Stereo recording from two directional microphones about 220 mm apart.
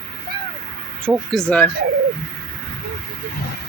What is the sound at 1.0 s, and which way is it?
Speech, 5° left (ahead or behind).